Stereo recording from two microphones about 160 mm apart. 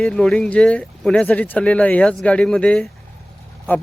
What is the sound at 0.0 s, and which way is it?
Speech, 5° left (ahead or behind).